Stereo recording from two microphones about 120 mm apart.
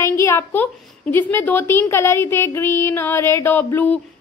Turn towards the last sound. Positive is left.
turn(degrees=20)  # may be behind; listen again after turning